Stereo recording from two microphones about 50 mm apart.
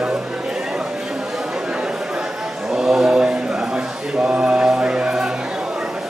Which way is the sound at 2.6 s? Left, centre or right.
Centre.